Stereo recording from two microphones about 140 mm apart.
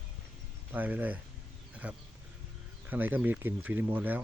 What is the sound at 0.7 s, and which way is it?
Speech, 15° right (ahead or behind).